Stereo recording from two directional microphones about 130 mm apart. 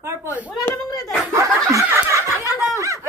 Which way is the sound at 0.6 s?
25° left (ahead or behind).